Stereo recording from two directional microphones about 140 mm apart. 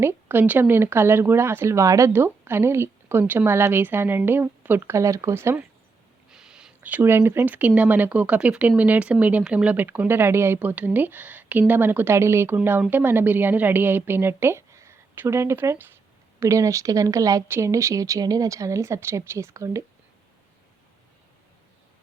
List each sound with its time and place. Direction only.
0.0 s speech: 15° right (ahead or behind)
6.3 s speech: 5° right (ahead or behind); by 19.8 s 20° right (ahead or behind)